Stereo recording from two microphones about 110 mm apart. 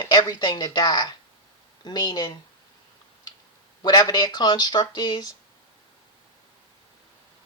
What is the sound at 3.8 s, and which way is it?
Speech, 40° left (ahead or behind).